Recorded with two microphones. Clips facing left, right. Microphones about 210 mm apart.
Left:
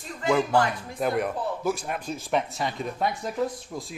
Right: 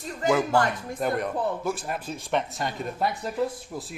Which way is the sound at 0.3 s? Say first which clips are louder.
Even; centre (ahead or behind).